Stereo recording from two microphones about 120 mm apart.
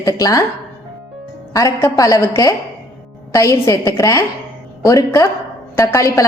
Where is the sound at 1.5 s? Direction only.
25° left (ahead or behind).